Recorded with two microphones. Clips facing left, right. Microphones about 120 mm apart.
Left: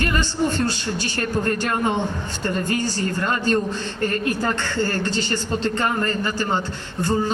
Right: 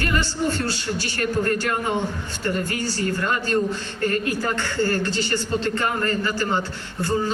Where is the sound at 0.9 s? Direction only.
20° left (ahead or behind).